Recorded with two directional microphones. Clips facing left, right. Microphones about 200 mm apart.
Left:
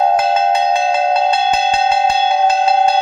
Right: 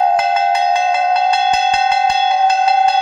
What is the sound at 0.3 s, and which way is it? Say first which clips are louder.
Cowbell: left 1 dB; 30° left (ahead or behind).